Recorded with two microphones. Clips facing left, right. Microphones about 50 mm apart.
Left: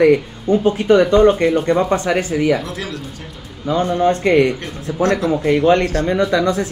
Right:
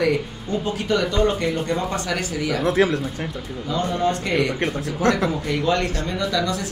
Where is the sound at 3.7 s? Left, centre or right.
Left.